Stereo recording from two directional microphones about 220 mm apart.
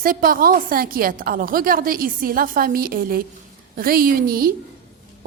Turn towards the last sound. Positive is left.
turn(degrees=-40)  # may be behind; listen again after turning